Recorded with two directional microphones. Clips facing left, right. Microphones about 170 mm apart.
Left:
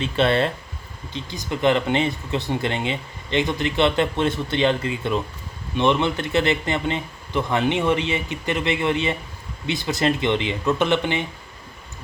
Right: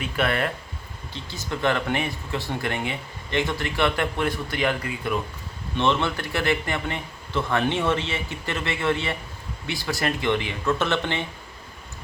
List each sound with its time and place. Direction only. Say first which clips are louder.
0.0 s speech: left 5 dB; 25° left (ahead or behind)